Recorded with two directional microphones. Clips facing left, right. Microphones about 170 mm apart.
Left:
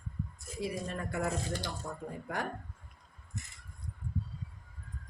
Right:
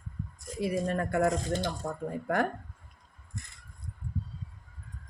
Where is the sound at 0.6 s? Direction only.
60° right (ahead or behind).